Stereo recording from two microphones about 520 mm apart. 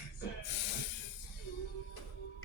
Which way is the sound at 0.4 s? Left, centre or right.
Left.